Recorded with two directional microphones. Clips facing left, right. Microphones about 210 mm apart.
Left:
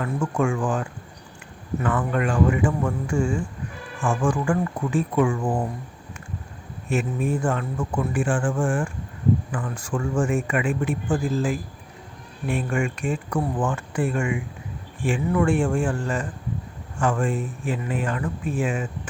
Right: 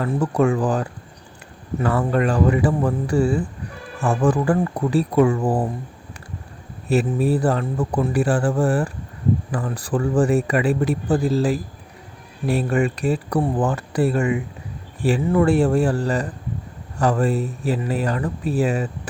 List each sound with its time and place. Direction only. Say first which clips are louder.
0.0 s speech: right 5 dB; 35° right (ahead or behind)
6.8 s speech: right 5 dB; 35° right (ahead or behind)